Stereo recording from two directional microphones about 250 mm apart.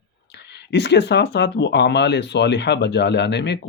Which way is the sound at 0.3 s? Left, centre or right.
Left.